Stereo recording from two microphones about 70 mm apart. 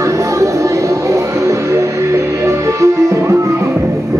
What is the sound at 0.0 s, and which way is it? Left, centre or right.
Music, right.